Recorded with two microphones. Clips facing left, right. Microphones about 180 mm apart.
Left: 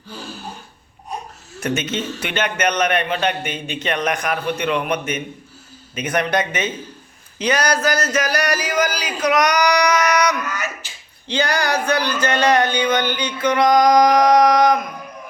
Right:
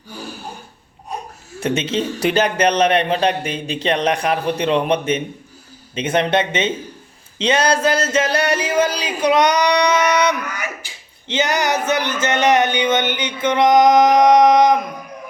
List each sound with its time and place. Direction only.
1.5 s a man's voice: 30° right (ahead or behind)
10.4 s speech: 15° right (ahead or behind)